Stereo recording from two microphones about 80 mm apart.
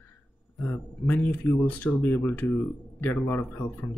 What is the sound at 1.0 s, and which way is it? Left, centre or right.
Speech, left.